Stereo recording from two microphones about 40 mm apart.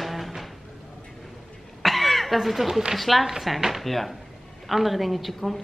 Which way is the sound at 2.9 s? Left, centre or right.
Centre.